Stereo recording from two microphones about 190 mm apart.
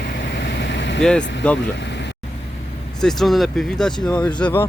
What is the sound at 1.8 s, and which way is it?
Vehicle, 65° left (ahead or behind).